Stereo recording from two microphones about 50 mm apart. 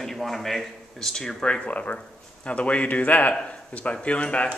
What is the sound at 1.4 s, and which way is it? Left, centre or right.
Speech, left.